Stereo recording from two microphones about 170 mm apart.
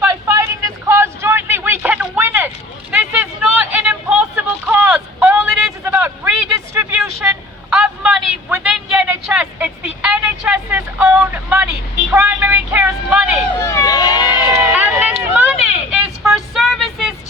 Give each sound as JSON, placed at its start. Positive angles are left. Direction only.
{"t": 0.1, "sound": "a sound", "side_deg": -15}
{"t": 5.8, "sound": "vehicle", "side_deg": -10}
{"t": 12.1, "sound": "a sound", "side_deg": -10}
{"t": 13.6, "sound": "run", "side_deg": 15}
{"t": 14.5, "sound": "run", "side_deg": -10}
{"t": 15.3, "sound": "vehicle", "side_deg": -10}